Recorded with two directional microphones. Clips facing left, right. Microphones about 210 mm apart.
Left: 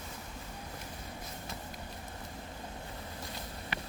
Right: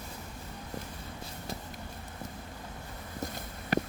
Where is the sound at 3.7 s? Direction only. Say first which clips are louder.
Right 14 dB; 40° right (ahead or behind).